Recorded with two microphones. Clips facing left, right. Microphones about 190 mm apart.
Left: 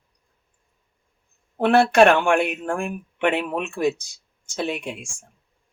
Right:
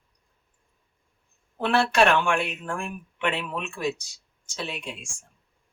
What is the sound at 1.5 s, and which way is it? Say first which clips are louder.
Speech: left 6 dB; 50° left (ahead or behind).